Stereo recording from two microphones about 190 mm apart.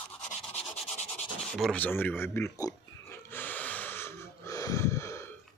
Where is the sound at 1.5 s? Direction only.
5° left (ahead or behind).